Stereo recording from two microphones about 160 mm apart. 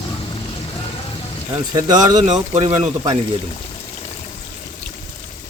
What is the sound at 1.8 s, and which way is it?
Speech, 25° right (ahead or behind).